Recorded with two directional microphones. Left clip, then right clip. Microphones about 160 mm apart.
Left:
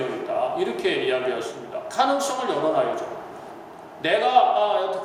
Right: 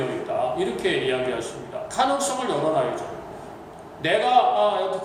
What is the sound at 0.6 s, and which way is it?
A man's voice, 25° left (ahead or behind).